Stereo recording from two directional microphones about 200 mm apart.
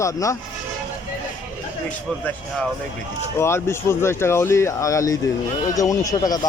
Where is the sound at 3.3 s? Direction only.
15° left (ahead or behind).